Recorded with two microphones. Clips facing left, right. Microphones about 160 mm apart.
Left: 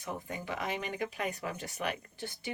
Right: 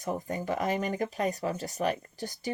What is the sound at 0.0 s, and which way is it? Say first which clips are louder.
Speech: right 7 dB; 40° right (ahead or behind).